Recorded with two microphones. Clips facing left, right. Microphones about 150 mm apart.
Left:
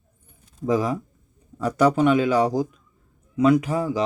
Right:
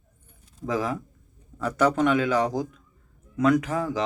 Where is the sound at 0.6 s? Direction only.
15° left (ahead or behind).